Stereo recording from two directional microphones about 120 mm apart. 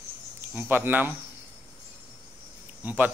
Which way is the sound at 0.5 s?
15° right (ahead or behind).